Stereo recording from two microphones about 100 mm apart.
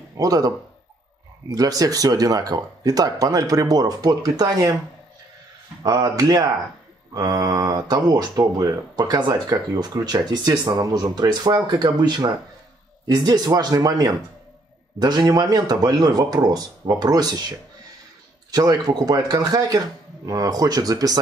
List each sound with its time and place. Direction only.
0.2 s speech: 35° right (ahead or behind)
1.5 s speech: 40° right (ahead or behind)
5.8 s speech: 40° right (ahead or behind)
18.5 s speech: 40° right (ahead or behind)